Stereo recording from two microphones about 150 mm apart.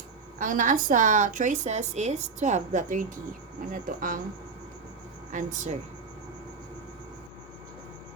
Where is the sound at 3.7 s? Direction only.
65° right (ahead or behind).